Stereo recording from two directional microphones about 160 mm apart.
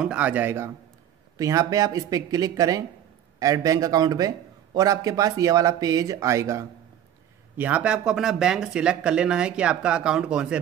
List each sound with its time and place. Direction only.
0.0 s speech: 10° right (ahead or behind)